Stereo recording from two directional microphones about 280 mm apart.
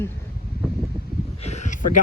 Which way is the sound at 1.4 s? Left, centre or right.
Left.